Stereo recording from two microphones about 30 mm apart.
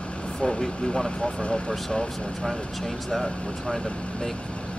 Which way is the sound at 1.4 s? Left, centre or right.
Left.